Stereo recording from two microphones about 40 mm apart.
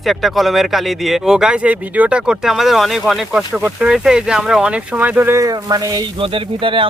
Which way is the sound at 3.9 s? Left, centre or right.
Centre.